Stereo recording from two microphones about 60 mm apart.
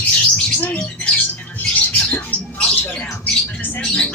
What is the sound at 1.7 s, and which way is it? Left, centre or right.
Squawk, left.